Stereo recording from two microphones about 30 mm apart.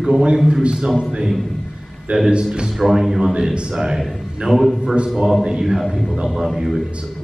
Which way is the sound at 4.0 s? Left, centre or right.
Centre.